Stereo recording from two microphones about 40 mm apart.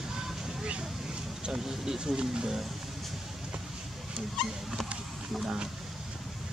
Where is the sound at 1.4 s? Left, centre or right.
Centre.